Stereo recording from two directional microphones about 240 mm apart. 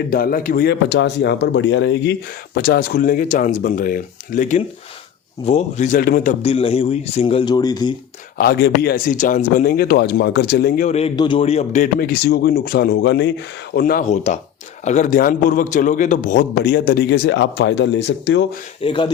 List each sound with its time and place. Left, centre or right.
0.1 s speech: left
2.6 s speech: left
6.4 s speech: left
8.4 s speech: left
18.8 s speech: left